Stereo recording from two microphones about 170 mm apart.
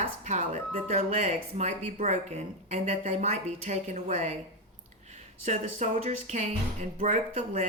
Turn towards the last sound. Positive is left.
turn(degrees=-40)  # may be behind; listen again after turning